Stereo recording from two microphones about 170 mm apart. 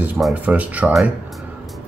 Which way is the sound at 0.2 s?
10° right (ahead or behind).